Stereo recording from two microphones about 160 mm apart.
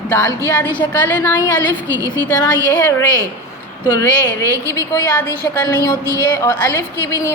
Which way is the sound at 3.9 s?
20° left (ahead or behind).